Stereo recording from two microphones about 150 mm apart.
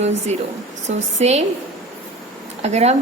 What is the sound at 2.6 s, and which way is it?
Speech, 45° right (ahead or behind).